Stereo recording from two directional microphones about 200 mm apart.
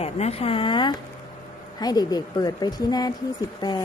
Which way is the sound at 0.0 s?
30° left (ahead or behind).